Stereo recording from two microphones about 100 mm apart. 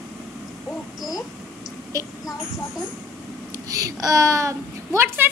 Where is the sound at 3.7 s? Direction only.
35° right (ahead or behind).